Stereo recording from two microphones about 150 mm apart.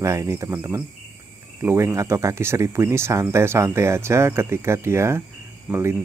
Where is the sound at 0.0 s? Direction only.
20° right (ahead or behind).